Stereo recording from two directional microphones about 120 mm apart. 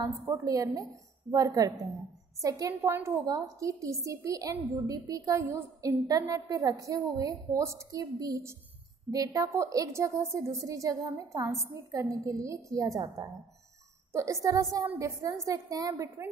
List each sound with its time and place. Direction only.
0.2 s a woman's voice: 25° right (ahead or behind)